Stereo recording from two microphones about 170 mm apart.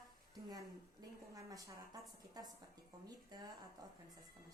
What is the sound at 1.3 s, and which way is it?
A woman's voice, 20° right (ahead or behind).